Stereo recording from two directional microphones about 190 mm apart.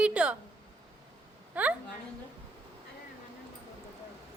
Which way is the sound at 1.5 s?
5° right (ahead or behind).